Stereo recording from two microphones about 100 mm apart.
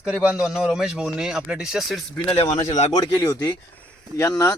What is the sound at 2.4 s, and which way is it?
A man's voice, 35° left (ahead or behind).